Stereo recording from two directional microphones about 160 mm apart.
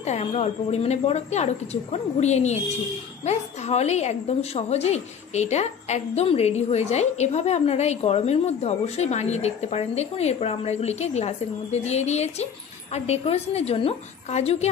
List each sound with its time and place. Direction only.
0.0 s a woman's voice: 40° left (ahead or behind)